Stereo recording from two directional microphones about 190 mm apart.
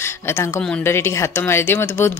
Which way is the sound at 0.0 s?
15° left (ahead or behind).